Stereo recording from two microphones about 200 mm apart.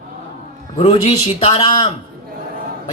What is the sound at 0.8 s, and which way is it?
Speech, 30° left (ahead or behind).